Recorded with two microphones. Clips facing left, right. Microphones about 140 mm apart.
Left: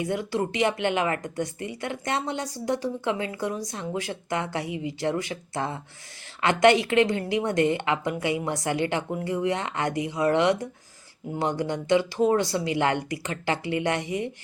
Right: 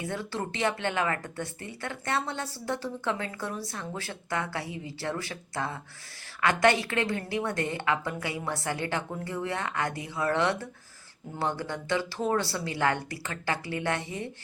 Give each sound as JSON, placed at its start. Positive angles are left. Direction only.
{"t": 0.0, "sound": "a woman's voice", "side_deg": 15}